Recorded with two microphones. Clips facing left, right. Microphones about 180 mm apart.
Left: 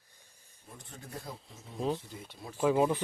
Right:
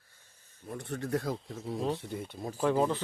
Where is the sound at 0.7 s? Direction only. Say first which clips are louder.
Right 13 dB; 70° right (ahead or behind); by 1.5 s 90° right.